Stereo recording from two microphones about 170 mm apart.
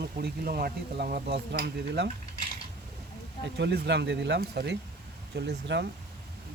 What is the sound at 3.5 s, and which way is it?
Speech, 80° right.